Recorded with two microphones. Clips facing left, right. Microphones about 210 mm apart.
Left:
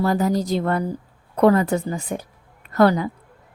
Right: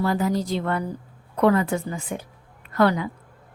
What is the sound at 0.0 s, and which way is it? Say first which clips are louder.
A woman's voice: left 3 dB; 40° left (ahead or behind).